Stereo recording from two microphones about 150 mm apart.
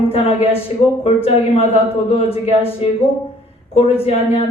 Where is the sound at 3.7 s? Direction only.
40° left (ahead or behind).